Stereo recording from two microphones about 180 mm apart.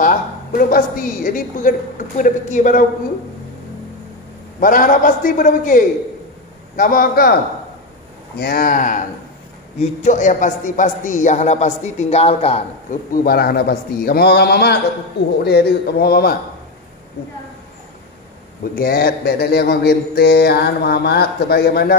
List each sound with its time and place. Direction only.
0.0 s a woman's voice: 50° left (ahead or behind)
4.6 s a woman's voice: 50° left (ahead or behind)
8.4 s a woman's voice: 55° left (ahead or behind); by 13.0 s 35° left (ahead or behind)
13.1 s mantra: 55° left (ahead or behind)
18.8 s mantra: 60° left (ahead or behind)